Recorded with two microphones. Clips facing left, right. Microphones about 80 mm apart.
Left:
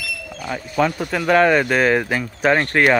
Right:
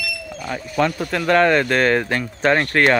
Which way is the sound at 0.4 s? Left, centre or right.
Centre.